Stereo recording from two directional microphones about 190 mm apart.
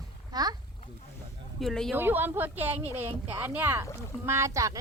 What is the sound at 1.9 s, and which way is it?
Speech, 10° right (ahead or behind).